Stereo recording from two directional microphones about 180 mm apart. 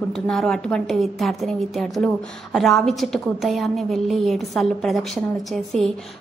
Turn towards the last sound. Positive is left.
turn(degrees=5)  # may be behind; listen again after turning